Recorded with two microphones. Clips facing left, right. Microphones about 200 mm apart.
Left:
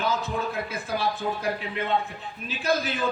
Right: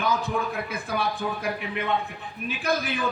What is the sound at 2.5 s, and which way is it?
Speech, 60° right (ahead or behind).